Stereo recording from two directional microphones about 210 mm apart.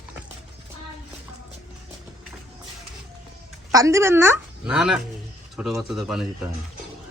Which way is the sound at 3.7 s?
15° right (ahead or behind).